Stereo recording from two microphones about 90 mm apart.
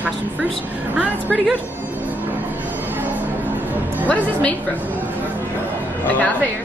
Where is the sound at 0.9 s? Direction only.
15° right (ahead or behind).